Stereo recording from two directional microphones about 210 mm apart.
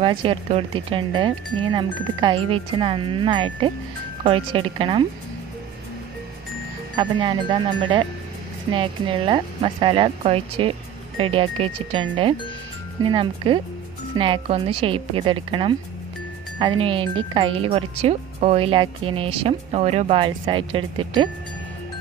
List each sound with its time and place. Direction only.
0.0 s speech: 25° right (ahead or behind)
7.0 s speech: 20° right (ahead or behind)
16.5 s speech: 25° right (ahead or behind)